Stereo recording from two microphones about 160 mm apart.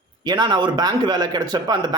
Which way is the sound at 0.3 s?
25° right (ahead or behind).